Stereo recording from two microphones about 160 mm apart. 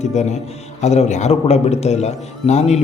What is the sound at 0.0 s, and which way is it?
A man's voice, 45° left (ahead or behind).